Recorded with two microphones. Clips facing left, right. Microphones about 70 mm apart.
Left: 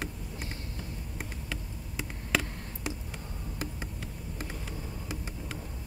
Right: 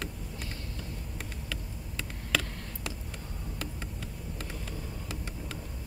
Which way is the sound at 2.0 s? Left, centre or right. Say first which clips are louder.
Left 1 dB; centre.